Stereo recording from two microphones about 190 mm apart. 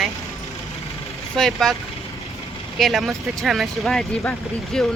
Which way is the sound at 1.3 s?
Centre (ahead or behind).